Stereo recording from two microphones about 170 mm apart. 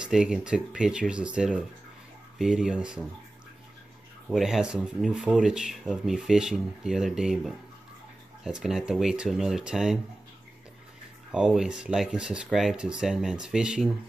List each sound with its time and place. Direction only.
0.0 s speech: 5° right (ahead or behind)
4.3 s speech: 5° right (ahead or behind)
11.3 s speech: 5° right (ahead or behind)